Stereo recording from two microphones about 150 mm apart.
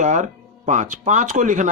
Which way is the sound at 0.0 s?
55° right (ahead or behind).